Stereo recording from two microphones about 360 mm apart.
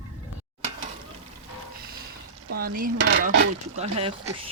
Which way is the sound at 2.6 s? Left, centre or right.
Right.